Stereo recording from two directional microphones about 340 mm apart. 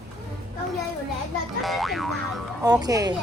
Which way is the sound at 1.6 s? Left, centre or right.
Centre.